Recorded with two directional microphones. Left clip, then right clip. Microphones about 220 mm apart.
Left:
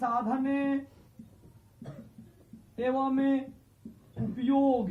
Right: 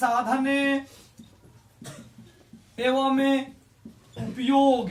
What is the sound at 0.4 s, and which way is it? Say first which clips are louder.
Speech: right 6 dB; 10° right (ahead or behind).